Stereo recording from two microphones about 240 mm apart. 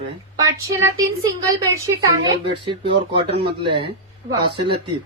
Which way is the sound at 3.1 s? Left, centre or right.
Right.